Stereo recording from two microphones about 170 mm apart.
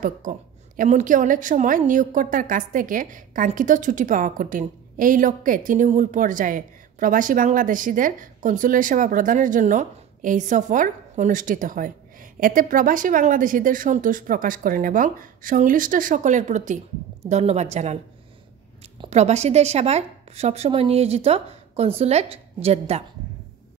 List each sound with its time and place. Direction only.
0.0 s a woman's voice: 50° right (ahead or behind)
18.9 s a woman's voice: 40° right (ahead or behind)